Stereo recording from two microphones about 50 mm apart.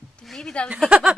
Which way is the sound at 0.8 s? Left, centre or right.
Right.